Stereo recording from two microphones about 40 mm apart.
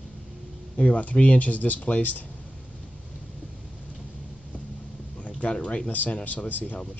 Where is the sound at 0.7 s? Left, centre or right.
Left.